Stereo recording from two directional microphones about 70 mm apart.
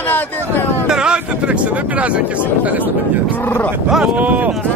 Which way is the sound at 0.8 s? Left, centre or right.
Centre.